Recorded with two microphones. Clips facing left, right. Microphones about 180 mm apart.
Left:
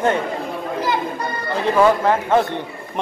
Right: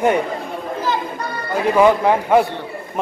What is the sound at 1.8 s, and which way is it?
Speech, 10° right (ahead or behind).